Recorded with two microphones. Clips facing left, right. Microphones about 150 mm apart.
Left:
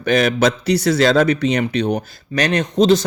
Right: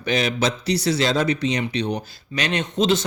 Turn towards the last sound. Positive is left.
turn(degrees=40)  # may be behind; listen again after turning